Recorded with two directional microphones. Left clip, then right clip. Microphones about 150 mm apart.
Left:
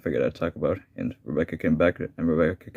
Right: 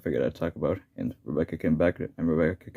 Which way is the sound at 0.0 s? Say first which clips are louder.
Left 2 dB; 10° left (ahead or behind).